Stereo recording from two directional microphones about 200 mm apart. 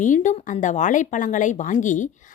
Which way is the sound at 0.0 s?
40° left (ahead or behind).